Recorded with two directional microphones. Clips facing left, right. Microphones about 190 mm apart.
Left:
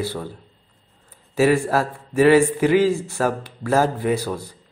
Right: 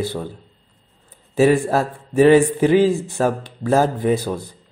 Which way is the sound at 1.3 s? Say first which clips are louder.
Right 2 dB; 20° right (ahead or behind).